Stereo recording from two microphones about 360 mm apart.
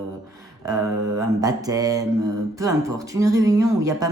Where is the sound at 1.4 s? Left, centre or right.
Centre.